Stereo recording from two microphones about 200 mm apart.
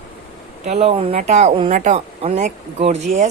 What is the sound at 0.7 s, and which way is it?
Speech, 30° right (ahead or behind).